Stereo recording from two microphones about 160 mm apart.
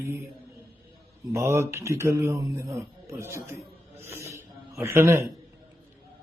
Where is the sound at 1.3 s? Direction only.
20° right (ahead or behind).